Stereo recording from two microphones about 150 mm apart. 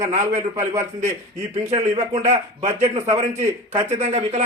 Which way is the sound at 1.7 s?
45° right (ahead or behind).